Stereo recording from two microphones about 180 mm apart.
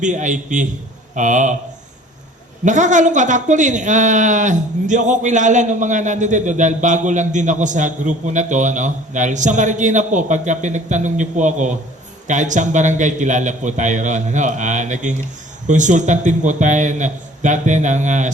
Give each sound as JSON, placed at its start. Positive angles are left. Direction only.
{"t": 0.0, "sound": "a man's voice", "side_deg": -45}
{"t": 2.6, "sound": "a man's voice", "side_deg": -45}